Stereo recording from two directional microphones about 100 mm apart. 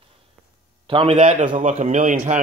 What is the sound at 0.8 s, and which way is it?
A man's voice, 60° right (ahead or behind).